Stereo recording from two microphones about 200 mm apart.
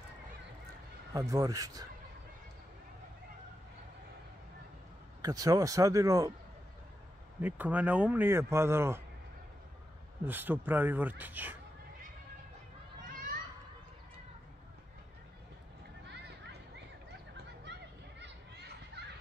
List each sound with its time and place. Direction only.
1.1 s a man's voice: 15° right (ahead or behind)
5.2 s a man's voice: 20° right (ahead or behind)
7.4 s a man's voice: 10° right (ahead or behind)
10.2 s a man's voice: 10° right (ahead or behind)
13.0 s children playing: 40° right (ahead or behind)